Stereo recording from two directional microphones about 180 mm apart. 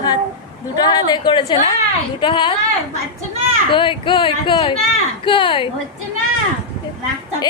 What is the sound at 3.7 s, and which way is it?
A woman's voice, 25° left (ahead or behind).